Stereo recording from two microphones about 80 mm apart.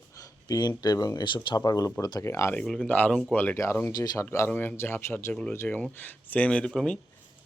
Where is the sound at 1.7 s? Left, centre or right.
Left.